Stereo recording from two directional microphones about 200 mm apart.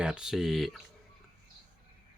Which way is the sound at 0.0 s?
5° right (ahead or behind).